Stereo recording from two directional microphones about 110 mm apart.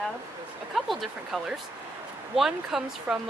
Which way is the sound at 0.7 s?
Centre (ahead or behind).